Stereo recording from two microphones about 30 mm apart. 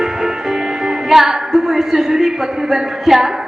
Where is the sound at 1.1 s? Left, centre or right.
Centre.